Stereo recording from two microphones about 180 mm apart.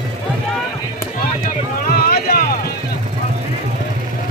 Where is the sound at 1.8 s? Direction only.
55° left (ahead or behind).